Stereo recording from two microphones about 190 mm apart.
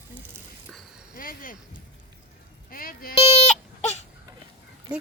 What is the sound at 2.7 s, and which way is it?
Speech, 50° left (ahead or behind).